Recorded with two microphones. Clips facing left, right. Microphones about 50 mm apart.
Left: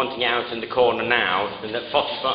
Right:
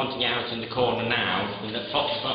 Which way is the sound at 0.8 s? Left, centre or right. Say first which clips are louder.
Left 6 dB; left.